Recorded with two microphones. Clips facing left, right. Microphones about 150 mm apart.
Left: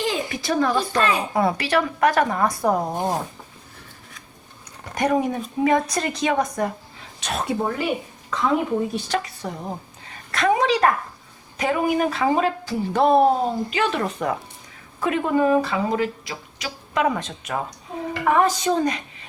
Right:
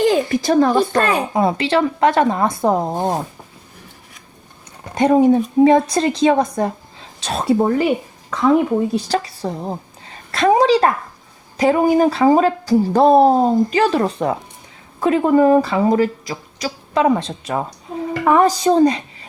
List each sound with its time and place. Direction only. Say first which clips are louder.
0.0 s a woman's voice: right 10 dB; 45° right (ahead or behind)
1.3 s speech: right 4 dB; 20° right (ahead or behind)
4.9 s speech: right 9 dB; 30° right (ahead or behind)
9.0 s a woman's voice: right 5 dB; 35° right (ahead or behind)